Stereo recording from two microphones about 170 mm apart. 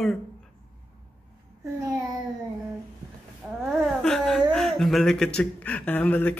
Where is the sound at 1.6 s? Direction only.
20° right (ahead or behind).